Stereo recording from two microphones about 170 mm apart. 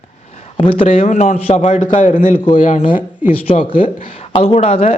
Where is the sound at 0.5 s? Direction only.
30° left (ahead or behind); by 2.3 s 50° left (ahead or behind).